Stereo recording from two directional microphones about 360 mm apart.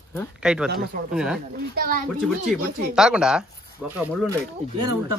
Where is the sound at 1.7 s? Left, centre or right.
Right.